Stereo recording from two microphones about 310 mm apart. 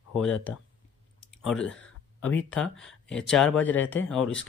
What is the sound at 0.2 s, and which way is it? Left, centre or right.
Speech, centre.